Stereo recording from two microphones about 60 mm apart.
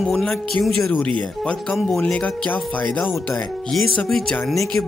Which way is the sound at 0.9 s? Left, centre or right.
Centre.